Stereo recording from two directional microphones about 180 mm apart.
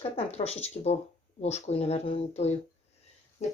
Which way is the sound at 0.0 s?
35° left (ahead or behind).